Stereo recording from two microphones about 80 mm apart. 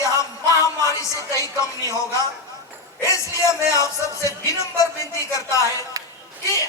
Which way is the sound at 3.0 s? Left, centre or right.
Left.